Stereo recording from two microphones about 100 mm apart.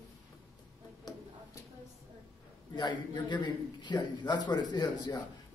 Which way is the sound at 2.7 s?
50° left (ahead or behind).